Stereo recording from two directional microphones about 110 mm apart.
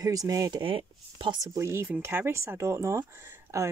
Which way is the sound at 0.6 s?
50° right (ahead or behind).